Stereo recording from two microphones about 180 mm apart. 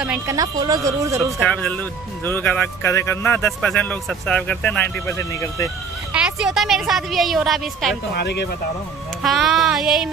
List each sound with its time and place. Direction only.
0.3 s speech: 20° right (ahead or behind)
1.4 s speech: 10° left (ahead or behind)
6.1 s a woman's voice: 5° right (ahead or behind)
8.1 s speech: 65° left (ahead or behind)
9.2 s a woman's voice: centre (ahead or behind)